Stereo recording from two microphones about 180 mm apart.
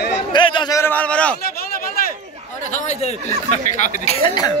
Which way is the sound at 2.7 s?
40° left (ahead or behind).